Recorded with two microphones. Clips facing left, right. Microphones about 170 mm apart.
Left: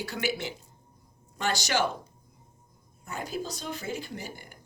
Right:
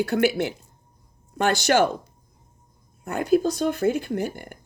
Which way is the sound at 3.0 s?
60° right (ahead or behind).